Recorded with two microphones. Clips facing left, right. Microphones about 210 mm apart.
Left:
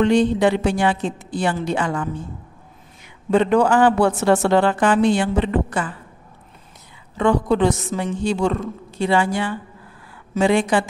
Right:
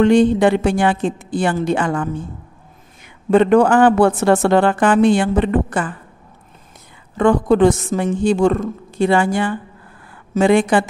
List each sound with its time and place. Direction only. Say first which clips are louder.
0.0 s a woman's voice: right 4 dB; 50° right (ahead or behind)
3.3 s a woman's voice: right 4 dB; 55° right (ahead or behind)
7.2 s a woman's voice: right 4 dB; 50° right (ahead or behind)